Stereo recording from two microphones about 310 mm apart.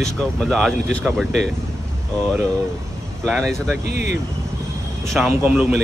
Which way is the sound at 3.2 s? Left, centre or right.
Centre.